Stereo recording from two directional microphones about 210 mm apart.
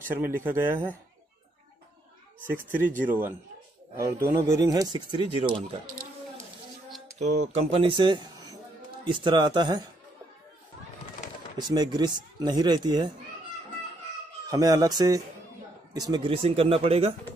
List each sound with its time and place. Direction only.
0.1 s speech: 10° right (ahead or behind)
2.4 s speech: 10° right (ahead or behind); by 5.8 s 25° right (ahead or behind)
7.2 s speech: 30° right (ahead or behind)
11.6 s speech: 20° right (ahead or behind)
14.5 s speech: 15° right (ahead or behind)